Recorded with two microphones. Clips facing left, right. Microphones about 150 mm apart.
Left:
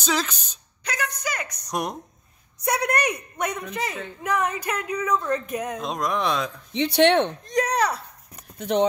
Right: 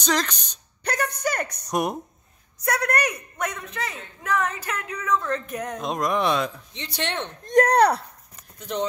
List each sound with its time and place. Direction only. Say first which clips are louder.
0.0 s speech: right 1 dB; 5° left (ahead or behind)
0.8 s a sound: right 4 dB; 55° right (ahead or behind)
1.7 s speech: right 3 dB; 5° right (ahead or behind)
2.6 s a man's voice: left 1 dB; 15° left (ahead or behind)
5.8 s speech: right 5 dB; centre (ahead or behind)
6.7 s speech: left 12 dB; 65° left (ahead or behind)
7.4 s speech: right 6 dB; 55° right (ahead or behind)
8.5 s speech: left 7 dB; 65° left (ahead or behind)